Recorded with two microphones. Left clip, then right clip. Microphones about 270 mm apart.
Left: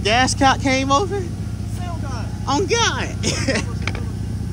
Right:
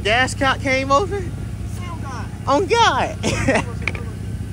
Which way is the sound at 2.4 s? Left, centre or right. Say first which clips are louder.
Right 4 dB; centre.